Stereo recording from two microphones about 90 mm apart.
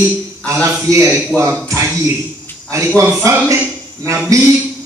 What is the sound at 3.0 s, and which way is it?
Speech, 35° right (ahead or behind).